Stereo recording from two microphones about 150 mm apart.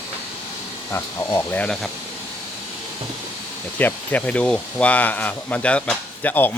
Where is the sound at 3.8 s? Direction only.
10° left (ahead or behind).